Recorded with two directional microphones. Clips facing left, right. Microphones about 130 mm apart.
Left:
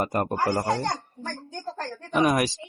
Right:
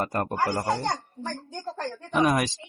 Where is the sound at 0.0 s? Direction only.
20° left (ahead or behind).